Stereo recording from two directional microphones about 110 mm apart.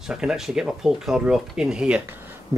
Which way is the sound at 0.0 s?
5° right (ahead or behind).